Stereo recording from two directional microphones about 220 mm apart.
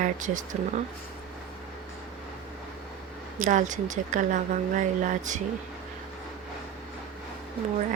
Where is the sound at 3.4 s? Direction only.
35° right (ahead or behind).